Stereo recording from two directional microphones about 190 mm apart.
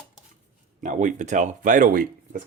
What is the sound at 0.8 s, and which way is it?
Speech, 40° right (ahead or behind).